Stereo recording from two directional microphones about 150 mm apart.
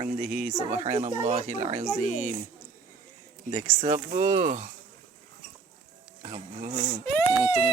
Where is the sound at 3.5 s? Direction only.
45° right (ahead or behind).